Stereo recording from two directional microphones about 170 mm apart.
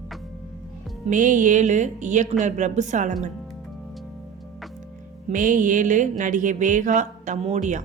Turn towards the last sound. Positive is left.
turn(degrees=-45)  # may be behind; listen again after turning